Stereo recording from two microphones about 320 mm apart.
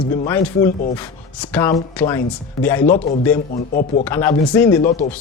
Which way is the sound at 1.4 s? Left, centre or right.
Centre.